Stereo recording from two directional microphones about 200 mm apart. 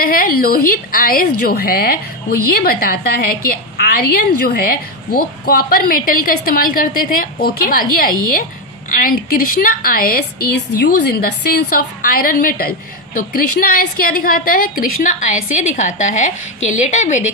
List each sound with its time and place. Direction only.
0.0 s a woman's voice: 45° left (ahead or behind)